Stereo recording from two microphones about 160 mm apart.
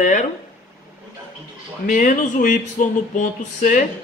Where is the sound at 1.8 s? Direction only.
55° left (ahead or behind).